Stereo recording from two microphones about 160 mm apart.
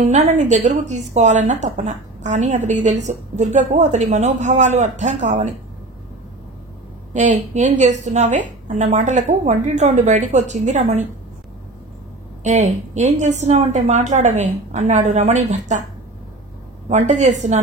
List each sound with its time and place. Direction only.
0.1 s a woman's voice: 50° right (ahead or behind)
7.2 s a woman's voice: 50° right (ahead or behind)
12.4 s a woman's voice: 45° right (ahead or behind)
16.9 s a woman's voice: 45° right (ahead or behind)